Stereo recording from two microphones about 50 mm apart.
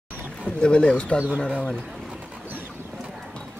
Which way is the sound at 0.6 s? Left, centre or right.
Left.